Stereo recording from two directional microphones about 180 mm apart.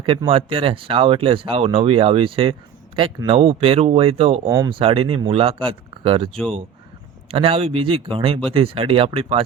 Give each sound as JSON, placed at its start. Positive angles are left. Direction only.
{"t": 0.0, "sound": "speech", "side_deg": -30}
{"t": 4.4, "sound": "speech", "side_deg": -15}
{"t": 4.7, "sound": "speech", "side_deg": -30}